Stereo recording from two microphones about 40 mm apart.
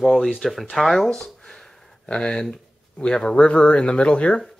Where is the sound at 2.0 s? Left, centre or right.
Left.